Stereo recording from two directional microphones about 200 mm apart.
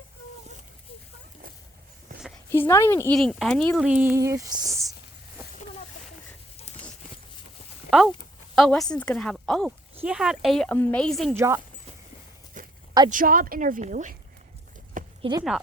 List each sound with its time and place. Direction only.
2.5 s a woman's voice: 15° left (ahead or behind)
3.2 s speech: centre (ahead or behind); by 4.9 s 15° right (ahead or behind)
7.9 s speech: centre (ahead or behind)
11.3 s speech: 15° right (ahead or behind)
12.6 s a sound: 40° right (ahead or behind)
13.1 s speech: 45° right (ahead or behind)
15.2 s speech: 20° right (ahead or behind)